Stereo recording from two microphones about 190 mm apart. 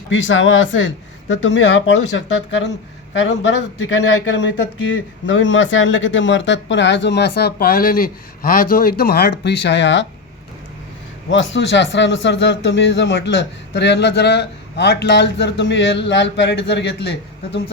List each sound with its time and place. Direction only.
0.1 s speech: 90° left; by 3.3 s 75° left (ahead or behind)
4.9 s a man's voice: 80° left
11.3 s a man's voice: 75° left (ahead or behind)